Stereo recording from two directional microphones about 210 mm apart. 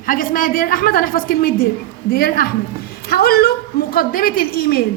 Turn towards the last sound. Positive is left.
turn(degrees=45)  # may be behind; listen again after turning